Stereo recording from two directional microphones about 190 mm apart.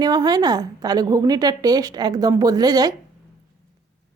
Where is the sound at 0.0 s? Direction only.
20° right (ahead or behind).